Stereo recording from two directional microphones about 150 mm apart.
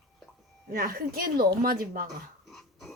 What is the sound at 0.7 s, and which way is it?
Speech, 80° right.